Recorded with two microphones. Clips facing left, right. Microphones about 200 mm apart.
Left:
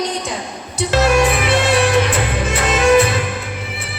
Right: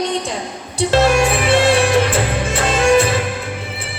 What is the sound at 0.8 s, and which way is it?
Music, 30° right (ahead or behind).